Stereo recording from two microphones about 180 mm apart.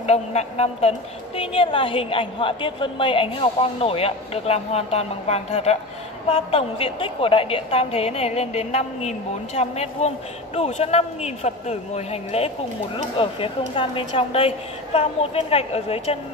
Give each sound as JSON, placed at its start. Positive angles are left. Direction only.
{"t": 0.0, "sound": "a woman's voice", "side_deg": 35}